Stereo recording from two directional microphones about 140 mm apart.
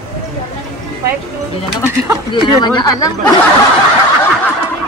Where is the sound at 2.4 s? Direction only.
30° left (ahead or behind).